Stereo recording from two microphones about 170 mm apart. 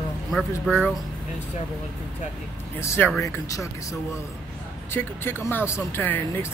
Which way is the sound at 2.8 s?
15° left (ahead or behind).